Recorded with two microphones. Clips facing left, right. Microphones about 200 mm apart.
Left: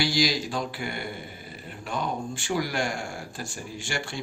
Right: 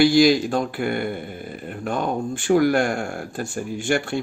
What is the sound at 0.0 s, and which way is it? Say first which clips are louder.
Speech: right 11 dB; 55° right (ahead or behind).